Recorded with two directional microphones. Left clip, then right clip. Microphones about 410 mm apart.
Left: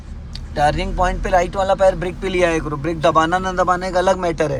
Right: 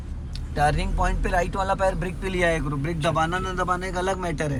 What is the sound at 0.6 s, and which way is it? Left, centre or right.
Speech, centre.